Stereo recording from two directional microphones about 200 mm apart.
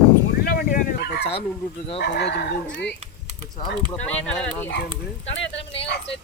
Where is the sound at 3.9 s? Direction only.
5° left (ahead or behind).